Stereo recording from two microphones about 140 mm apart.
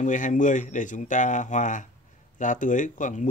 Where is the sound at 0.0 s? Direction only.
65° left (ahead or behind).